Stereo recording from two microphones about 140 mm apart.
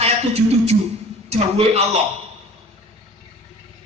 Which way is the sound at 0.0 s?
45° right (ahead or behind).